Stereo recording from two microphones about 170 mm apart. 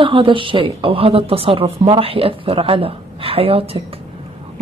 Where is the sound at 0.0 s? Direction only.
30° right (ahead or behind).